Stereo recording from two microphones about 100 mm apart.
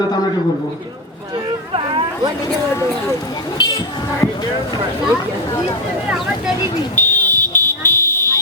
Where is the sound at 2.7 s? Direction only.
30° left (ahead or behind).